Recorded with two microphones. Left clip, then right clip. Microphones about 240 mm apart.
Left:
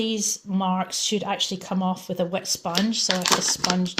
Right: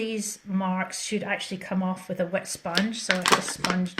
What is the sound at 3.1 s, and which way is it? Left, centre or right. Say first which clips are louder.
Speech: right 2 dB; left.